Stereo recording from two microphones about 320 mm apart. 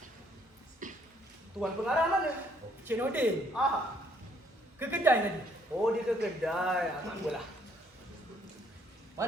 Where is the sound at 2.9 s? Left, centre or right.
Centre.